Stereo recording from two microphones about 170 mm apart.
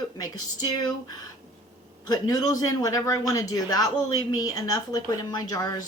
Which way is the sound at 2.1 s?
20° left (ahead or behind).